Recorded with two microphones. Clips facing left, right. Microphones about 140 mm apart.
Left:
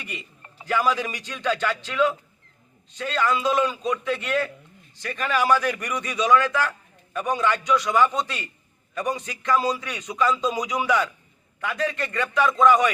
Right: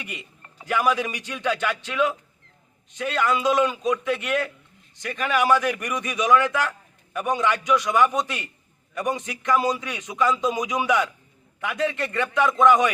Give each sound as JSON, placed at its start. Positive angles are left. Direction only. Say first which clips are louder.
{"t": 0.7, "sound": "a man's voice", "louder": "right 1 dB", "side_deg": -15}